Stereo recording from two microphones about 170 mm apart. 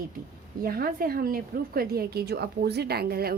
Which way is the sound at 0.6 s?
60° right (ahead or behind).